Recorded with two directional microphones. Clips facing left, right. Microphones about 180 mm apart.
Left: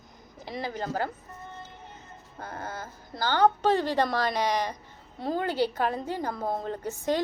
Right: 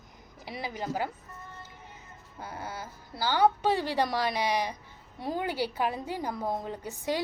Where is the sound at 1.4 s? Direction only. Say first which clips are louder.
Left 6 dB; 25° left (ahead or behind).